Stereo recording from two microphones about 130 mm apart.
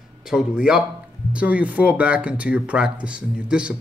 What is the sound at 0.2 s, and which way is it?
A man's voice, 5° right (ahead or behind).